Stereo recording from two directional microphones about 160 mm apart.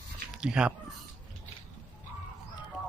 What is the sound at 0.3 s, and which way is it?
Speech, 5° right (ahead or behind).